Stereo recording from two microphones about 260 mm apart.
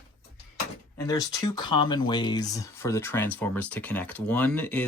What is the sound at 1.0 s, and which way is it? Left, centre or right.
Speech, centre.